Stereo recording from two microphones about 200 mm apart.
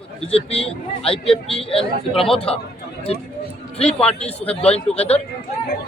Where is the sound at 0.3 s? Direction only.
30° left (ahead or behind).